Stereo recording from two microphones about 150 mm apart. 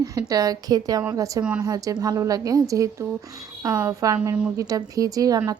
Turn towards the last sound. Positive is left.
turn(degrees=-25)  # may be behind; listen again after turning